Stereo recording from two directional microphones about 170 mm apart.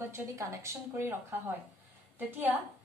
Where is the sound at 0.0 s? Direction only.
15° right (ahead or behind).